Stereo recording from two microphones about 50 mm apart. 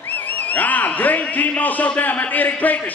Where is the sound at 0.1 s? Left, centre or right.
Left.